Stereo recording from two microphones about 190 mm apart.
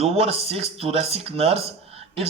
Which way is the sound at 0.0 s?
30° right (ahead or behind).